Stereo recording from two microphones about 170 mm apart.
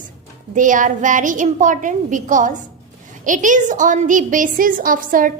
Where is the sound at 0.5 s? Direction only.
50° right (ahead or behind).